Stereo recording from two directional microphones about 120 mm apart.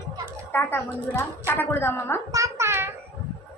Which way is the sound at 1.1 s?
20° left (ahead or behind).